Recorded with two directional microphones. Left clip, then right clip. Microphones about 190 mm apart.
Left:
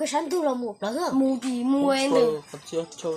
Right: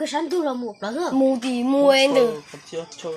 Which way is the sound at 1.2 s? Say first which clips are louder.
Right 5 dB; 40° right (ahead or behind).